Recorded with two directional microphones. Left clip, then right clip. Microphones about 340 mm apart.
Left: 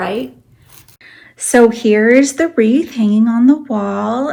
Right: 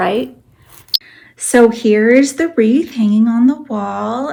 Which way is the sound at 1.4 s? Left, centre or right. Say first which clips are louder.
Even; centre.